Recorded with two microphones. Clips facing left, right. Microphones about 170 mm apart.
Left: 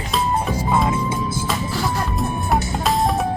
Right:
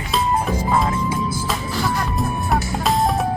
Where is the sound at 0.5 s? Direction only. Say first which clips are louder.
Even; 5° left (ahead or behind).